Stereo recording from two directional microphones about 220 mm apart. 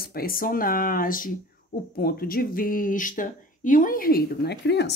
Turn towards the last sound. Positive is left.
turn(degrees=50)  # may be behind; listen again after turning